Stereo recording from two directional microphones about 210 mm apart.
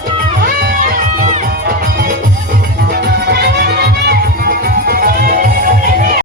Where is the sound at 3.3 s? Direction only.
50° right (ahead or behind).